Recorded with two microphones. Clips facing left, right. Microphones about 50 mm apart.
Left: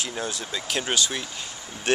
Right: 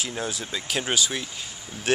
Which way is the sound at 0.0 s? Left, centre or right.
Centre.